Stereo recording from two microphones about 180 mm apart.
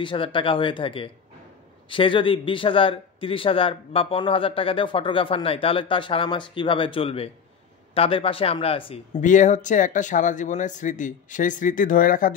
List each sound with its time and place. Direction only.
0.0 s speech: 30° left (ahead or behind)
9.2 s speech: 45° left (ahead or behind)